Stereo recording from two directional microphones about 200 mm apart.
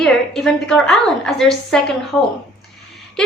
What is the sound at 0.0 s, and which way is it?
A woman's voice, centre (ahead or behind).